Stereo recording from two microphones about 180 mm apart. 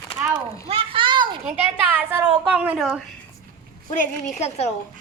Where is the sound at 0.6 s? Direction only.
30° right (ahead or behind).